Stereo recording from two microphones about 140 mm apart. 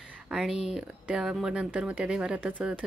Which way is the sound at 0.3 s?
5° right (ahead or behind).